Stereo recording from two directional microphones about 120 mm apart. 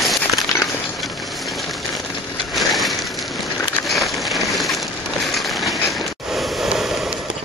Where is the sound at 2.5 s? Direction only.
Centre (ahead or behind).